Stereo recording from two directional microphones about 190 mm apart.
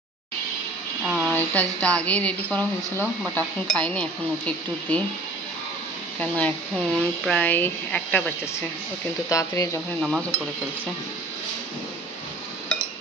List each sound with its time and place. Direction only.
1.0 s a sound: centre (ahead or behind)
1.3 s speech: 10° left (ahead or behind)
6.1 s speech: 10° left (ahead or behind)
9.3 s speech: 15° left (ahead or behind)
9.9 s speech: centre (ahead or behind)